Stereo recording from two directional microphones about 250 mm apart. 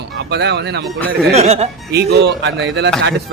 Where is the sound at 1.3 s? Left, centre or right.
Right.